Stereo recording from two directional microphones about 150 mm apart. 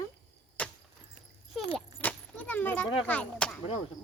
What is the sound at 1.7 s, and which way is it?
A child's voice, 10° left (ahead or behind).